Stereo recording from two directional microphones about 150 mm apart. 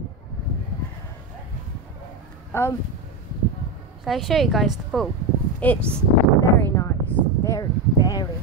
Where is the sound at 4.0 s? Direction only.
Centre (ahead or behind).